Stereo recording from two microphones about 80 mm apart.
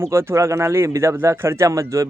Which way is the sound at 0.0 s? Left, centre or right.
Right.